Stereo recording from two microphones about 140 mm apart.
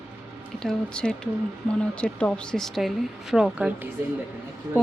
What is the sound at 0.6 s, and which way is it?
Speech, 5° left (ahead or behind).